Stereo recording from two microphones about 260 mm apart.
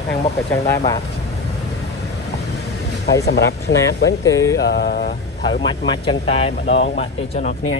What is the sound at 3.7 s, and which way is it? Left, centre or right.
Speech, left.